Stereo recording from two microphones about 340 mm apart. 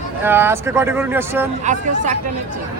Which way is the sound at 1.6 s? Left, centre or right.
Right.